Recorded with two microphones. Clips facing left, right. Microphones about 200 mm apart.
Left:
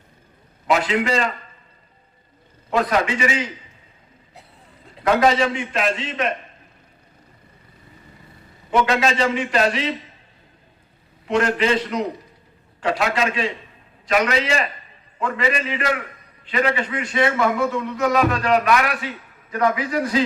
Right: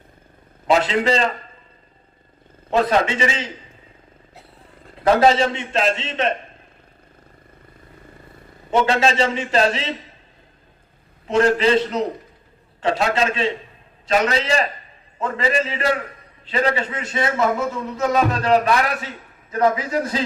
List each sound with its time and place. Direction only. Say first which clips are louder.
0.7 s a man's voice: right 2 dB; 30° right (ahead or behind)
2.6 s a man's voice: right 2 dB; 30° right (ahead or behind)
5.0 s a man's voice: right 2 dB; 30° right (ahead or behind)
8.7 s a man's voice: right 1 dB; 30° right (ahead or behind)
11.3 s a man's voice: right 3 dB; 35° right (ahead or behind)